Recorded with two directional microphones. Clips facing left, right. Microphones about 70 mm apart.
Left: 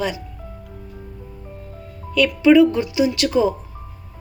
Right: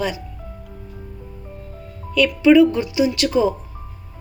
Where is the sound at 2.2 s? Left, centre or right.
Left.